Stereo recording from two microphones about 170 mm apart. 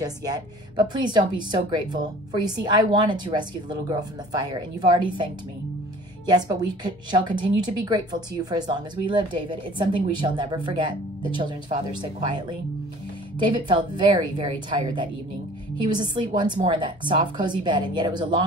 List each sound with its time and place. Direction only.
0.0 s a woman's voice: 20° right (ahead or behind)